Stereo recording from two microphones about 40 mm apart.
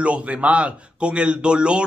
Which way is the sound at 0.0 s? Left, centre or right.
Right.